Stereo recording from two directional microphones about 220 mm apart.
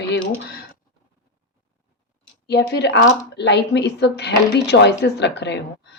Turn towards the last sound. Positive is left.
turn(degrees=50)  # may be behind; listen again after turning